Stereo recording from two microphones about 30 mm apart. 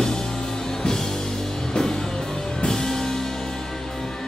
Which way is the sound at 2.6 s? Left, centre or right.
Centre.